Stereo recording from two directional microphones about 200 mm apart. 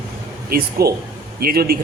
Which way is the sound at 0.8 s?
50° right (ahead or behind).